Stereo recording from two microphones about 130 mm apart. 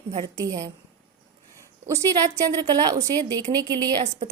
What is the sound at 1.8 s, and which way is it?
A woman's voice, 25° right (ahead or behind).